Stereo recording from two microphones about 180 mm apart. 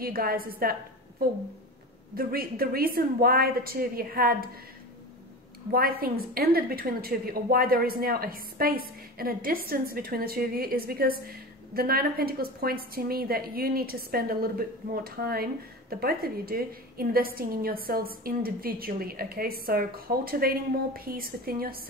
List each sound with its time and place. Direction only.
0.0 s a woman's voice: 55° right (ahead or behind)
2.1 s a woman's voice: 55° right (ahead or behind)
5.7 s a woman's voice: 55° right (ahead or behind)